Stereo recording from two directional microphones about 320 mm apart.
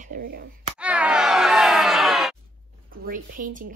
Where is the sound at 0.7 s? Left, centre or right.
Centre.